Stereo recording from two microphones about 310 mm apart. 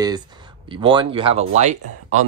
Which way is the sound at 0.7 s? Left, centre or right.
Centre.